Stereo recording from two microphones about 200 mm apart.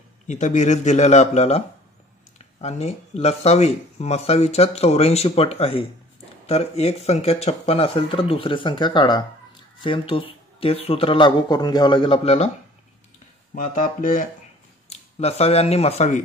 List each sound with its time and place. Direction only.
0.3 s speech: 35° left (ahead or behind)
2.6 s speech: 30° left (ahead or behind)
13.6 s speech: 40° left (ahead or behind)